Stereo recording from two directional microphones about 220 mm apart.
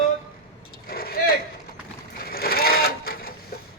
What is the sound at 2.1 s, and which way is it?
Sewing machine, 45° left (ahead or behind).